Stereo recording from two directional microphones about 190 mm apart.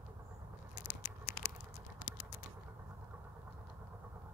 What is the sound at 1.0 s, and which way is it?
Typing, 45° left (ahead or behind).